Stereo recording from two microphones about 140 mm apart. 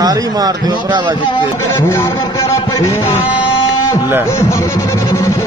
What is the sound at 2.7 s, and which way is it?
Music, 20° left (ahead or behind).